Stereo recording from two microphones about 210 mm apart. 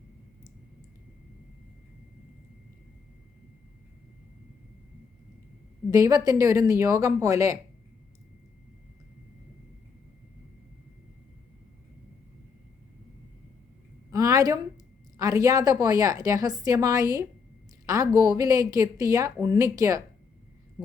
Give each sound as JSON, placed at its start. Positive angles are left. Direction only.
{"t": 5.9, "sound": "a woman's voice", "side_deg": -15}
{"t": 14.1, "sound": "a sound", "side_deg": -15}
{"t": 15.2, "sound": "a woman's voice", "side_deg": -15}